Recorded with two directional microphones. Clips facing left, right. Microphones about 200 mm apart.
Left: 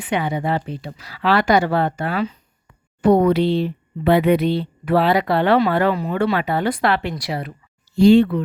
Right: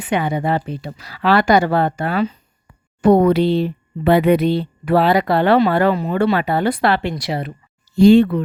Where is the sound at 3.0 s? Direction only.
50° right (ahead or behind); by 7.5 s 25° right (ahead or behind).